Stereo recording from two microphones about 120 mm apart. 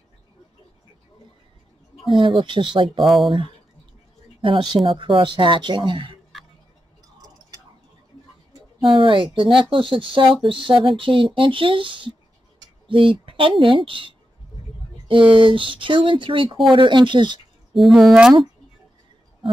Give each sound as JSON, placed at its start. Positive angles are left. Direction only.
{"t": 2.2, "sound": "speech", "side_deg": -45}
{"t": 3.0, "sound": "speech", "side_deg": 0}
{"t": 4.4, "sound": "speech", "side_deg": -45}
{"t": 8.9, "sound": "speech", "side_deg": -45}
{"t": 17.7, "sound": "speech", "side_deg": 0}